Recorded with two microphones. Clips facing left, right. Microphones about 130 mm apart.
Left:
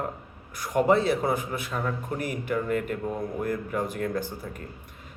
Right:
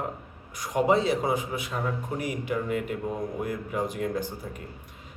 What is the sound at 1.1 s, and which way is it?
Speech, 15° right (ahead or behind).